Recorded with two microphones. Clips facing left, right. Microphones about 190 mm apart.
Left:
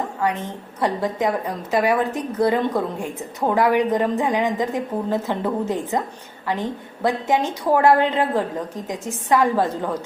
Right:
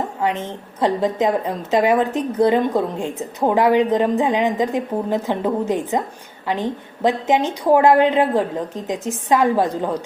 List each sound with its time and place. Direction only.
0.2 s a woman's voice: 20° right (ahead or behind)